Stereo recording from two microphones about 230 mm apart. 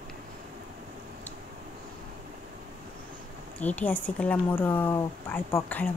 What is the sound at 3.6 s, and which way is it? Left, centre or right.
A woman's voice, centre.